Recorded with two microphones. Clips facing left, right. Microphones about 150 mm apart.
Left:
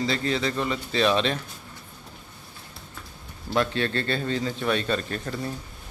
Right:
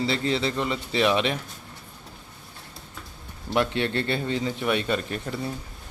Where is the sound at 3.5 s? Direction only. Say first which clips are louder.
Right 1 dB; 20° right (ahead or behind).